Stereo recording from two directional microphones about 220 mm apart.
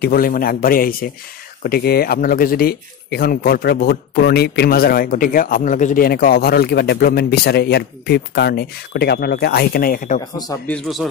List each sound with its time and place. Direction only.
0.0 s a man's voice: 40° left (ahead or behind)
10.3 s speech: 15° left (ahead or behind)
10.7 s a man's voice: centre (ahead or behind)